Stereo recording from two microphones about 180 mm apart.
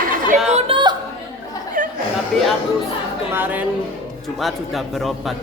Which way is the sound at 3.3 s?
10° right (ahead or behind).